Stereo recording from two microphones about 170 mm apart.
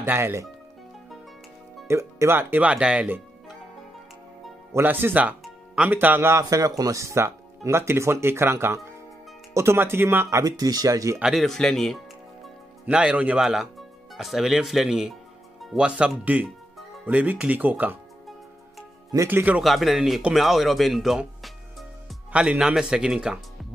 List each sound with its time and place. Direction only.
0.0 s speech: 15° right (ahead or behind)
1.9 s speech: 15° right (ahead or behind)
4.7 s speech: 10° right (ahead or behind)
11.1 s speech: centre (ahead or behind)
15.6 s music: 5° right (ahead or behind)
17.0 s speech: 10° right (ahead or behind)
19.1 s speech: 10° right (ahead or behind)